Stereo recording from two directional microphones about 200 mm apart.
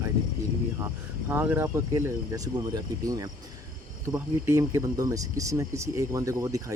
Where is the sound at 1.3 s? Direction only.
10° right (ahead or behind).